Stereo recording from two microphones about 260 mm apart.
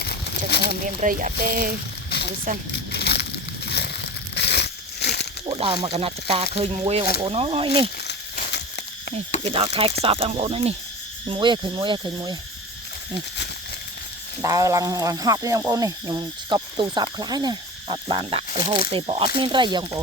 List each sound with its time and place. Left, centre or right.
0.7 s speech: right
2.0 s a sound: left
3.7 s crumpling: left
5.5 s speech: right
9.4 s speech: right
14.4 s speech: centre